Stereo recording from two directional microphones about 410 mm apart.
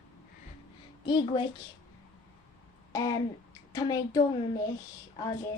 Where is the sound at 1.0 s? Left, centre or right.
Centre.